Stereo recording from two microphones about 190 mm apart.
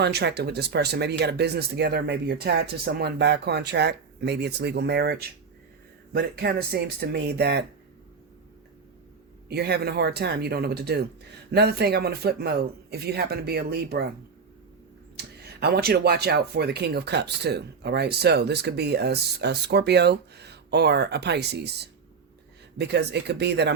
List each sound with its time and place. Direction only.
0.0 s speech: 60° right (ahead or behind)
6.1 s speech: 60° right (ahead or behind)
9.5 s speech: 60° right (ahead or behind)
15.6 s speech: 55° right (ahead or behind)